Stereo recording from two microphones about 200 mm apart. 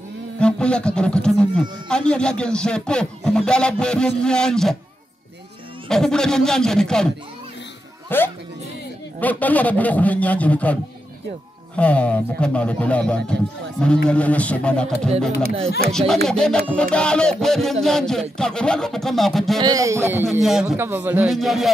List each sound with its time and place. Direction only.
0.4 s speech: 5° left (ahead or behind)
5.9 s speech: centre (ahead or behind)
8.1 s a man's voice: 10° left (ahead or behind)
15.9 s speech: centre (ahead or behind)
19.6 s a man's voice: 15° right (ahead or behind)
20.4 s a man's voice: 5° right (ahead or behind)